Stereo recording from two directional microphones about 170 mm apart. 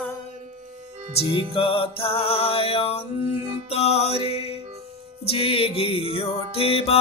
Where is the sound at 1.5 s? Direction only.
35° left (ahead or behind).